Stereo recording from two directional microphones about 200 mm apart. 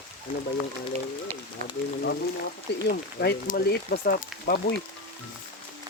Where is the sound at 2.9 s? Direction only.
50° left (ahead or behind).